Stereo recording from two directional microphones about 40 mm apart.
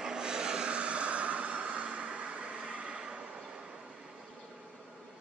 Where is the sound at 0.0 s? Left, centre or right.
Centre.